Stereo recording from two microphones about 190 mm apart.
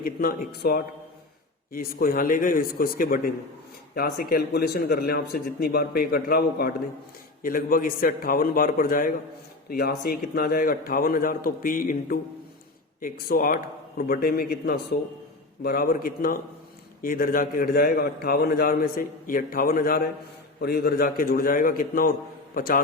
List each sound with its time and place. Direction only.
0.0 s a man's voice: 50° left (ahead or behind)